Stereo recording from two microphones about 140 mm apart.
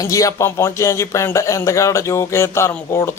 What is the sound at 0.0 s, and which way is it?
A man's voice, 25° left (ahead or behind).